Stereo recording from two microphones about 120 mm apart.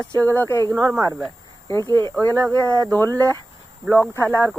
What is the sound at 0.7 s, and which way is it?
Speech, 25° right (ahead or behind).